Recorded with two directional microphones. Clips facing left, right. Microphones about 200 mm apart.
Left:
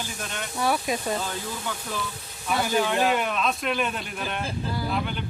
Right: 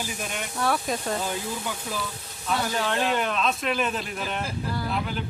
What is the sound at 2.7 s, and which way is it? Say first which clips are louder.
Speech: left 4 dB; 10° left (ahead or behind).